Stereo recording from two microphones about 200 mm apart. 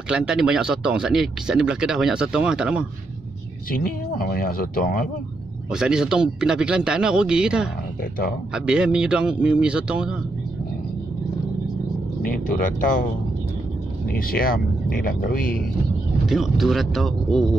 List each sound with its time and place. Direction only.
0.1 s speech: 5° right (ahead or behind)
3.7 s speech: 45° left (ahead or behind)
5.7 s speech: 5° right (ahead or behind)
8.0 s speech: 50° left (ahead or behind)
8.5 s speech: 5° right (ahead or behind)
12.2 s speech: 45° left (ahead or behind)
14.0 s speech: 45° left (ahead or behind)
16.3 s speech: centre (ahead or behind)